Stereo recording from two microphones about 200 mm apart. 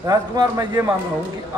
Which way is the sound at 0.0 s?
20° right (ahead or behind).